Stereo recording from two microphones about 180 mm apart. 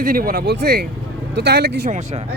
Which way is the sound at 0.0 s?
50° right (ahead or behind).